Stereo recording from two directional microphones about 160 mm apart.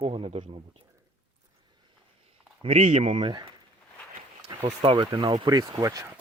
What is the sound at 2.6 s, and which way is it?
Speech, 40° right (ahead or behind).